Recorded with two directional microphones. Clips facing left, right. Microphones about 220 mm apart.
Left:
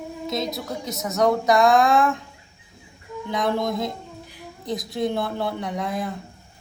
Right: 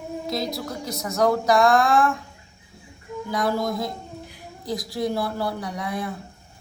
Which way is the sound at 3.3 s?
Centre (ahead or behind).